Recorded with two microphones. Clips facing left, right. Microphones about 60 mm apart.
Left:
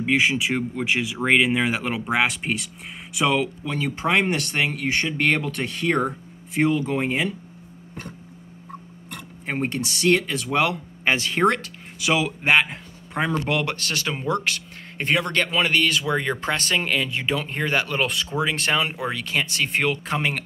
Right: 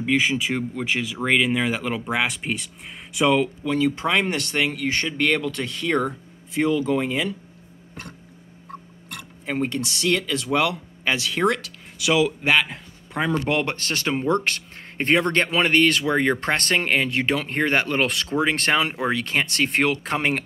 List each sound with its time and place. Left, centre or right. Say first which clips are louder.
0.0 s speech: left 1 dB; centre
4.1 s speech: left 1 dB; left
9.5 s speech: right 1 dB; left
10.7 s speech: left 2 dB; left
12.7 s a sound: even; centre
13.5 s speech: right 1 dB; right
17.1 s speech: right 3 dB; right
18.0 s speech: right 1 dB; right
18.4 s speech: right 2 dB; right